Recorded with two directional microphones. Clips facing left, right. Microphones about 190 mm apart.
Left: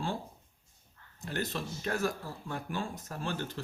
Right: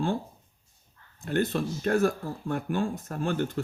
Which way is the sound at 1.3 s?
55° right (ahead or behind).